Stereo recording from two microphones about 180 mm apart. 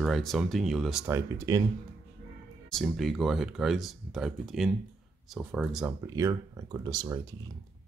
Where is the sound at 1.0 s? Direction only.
15° right (ahead or behind).